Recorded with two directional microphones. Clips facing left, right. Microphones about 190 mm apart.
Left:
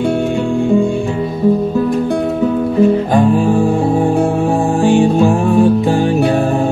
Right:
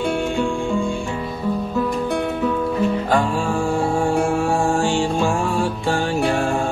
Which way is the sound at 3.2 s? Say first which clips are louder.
Left 9 dB; 20° left (ahead or behind).